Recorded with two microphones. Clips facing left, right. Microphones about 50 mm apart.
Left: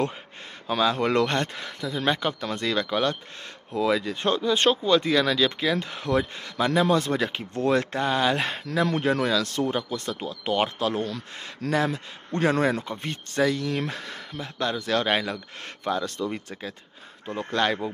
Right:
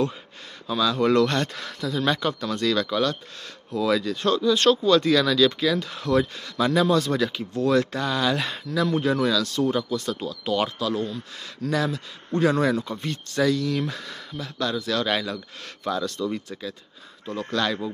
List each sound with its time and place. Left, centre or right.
0.7 s speech: left